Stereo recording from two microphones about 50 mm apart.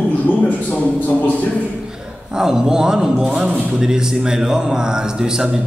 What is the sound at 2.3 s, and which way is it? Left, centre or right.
Speech, centre.